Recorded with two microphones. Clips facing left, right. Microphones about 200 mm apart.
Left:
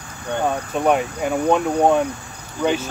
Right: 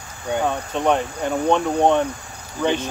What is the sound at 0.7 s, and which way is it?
Speech, 10° left (ahead or behind).